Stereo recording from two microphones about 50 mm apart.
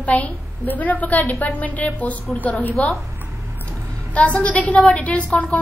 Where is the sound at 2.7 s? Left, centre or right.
Centre.